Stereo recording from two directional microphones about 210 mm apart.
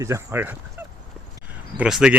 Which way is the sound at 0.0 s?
10° right (ahead or behind).